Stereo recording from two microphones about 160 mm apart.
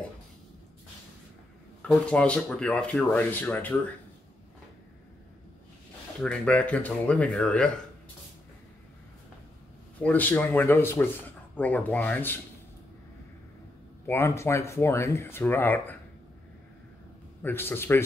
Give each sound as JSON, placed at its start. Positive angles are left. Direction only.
{"t": 1.8, "sound": "speech", "side_deg": 5}
{"t": 6.2, "sound": "speech", "side_deg": 10}
{"t": 10.0, "sound": "speech", "side_deg": 10}
{"t": 14.0, "sound": "speech", "side_deg": 15}
{"t": 17.4, "sound": "speech", "side_deg": 15}